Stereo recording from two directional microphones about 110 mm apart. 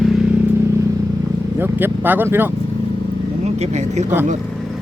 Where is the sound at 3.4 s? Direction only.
90° right.